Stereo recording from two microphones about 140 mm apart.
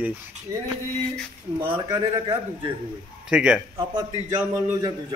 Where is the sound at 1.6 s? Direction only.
35° right (ahead or behind).